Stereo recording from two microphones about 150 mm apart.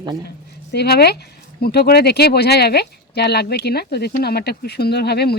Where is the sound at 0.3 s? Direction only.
90° left.